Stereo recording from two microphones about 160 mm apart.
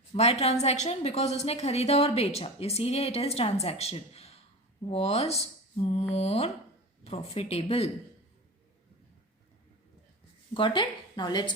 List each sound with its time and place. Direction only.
0.1 s a woman's voice: 40° left (ahead or behind)
10.5 s a woman's voice: 30° left (ahead or behind)